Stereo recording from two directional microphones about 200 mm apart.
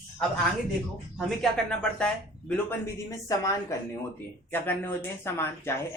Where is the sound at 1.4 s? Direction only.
5° left (ahead or behind).